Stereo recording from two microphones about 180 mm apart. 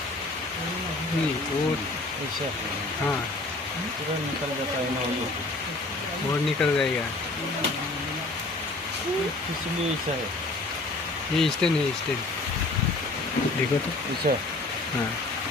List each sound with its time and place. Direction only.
6.6 s speech: 5° left (ahead or behind)
11.3 s speech: centre (ahead or behind)
14.3 s speech: 50° right (ahead or behind)